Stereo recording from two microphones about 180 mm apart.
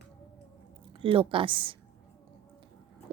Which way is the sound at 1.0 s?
30° right (ahead or behind).